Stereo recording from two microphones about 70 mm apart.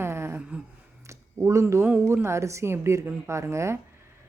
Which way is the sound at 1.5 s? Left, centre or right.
Right.